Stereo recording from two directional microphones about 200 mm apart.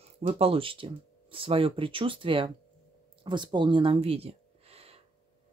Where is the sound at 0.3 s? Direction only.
30° right (ahead or behind).